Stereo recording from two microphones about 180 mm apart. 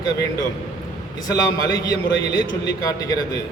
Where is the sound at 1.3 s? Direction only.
20° left (ahead or behind).